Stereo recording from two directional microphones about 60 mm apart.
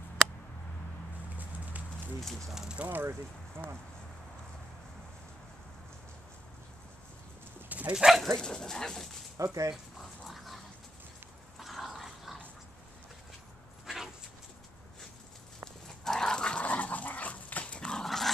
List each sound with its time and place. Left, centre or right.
1.4 s clip-clop: right
2.5 s speech: centre
2.8 s speech: right
7.9 s speech: centre
8.4 s speech: centre
9.4 s speech: right
9.9 s dog: centre
11.5 s a sound: centre
13.8 s dog: centre
15.6 s dog: centre